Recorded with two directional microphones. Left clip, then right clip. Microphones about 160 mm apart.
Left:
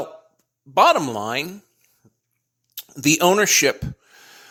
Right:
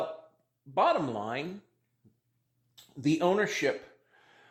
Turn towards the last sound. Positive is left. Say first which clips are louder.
# left 13 dB
turn(degrees=35)  # may be behind; listen again after turning